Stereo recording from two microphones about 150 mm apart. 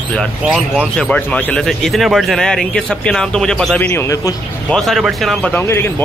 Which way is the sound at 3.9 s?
20° left (ahead or behind).